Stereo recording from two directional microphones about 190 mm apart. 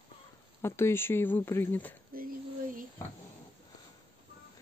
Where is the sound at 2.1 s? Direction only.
50° right (ahead or behind).